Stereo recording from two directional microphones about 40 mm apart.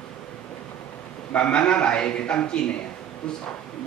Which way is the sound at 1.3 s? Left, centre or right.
Left.